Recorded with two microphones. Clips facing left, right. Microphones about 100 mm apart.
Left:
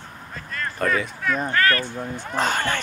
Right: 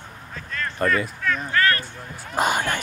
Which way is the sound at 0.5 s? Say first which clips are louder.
Right 1 dB; centre (ahead or behind).